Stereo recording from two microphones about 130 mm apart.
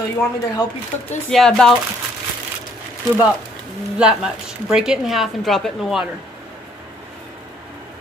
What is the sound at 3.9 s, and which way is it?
Speech, 5° right (ahead or behind).